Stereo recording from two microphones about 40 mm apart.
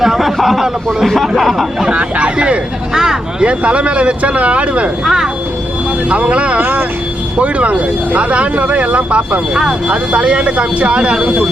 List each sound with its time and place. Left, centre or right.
0.0 s a man's voice: centre
1.8 s speech: right
2.9 s speech: centre
3.4 s speech: right
5.0 s speech: centre
6.1 s speech: right
6.6 s speech: right
7.3 s speech: right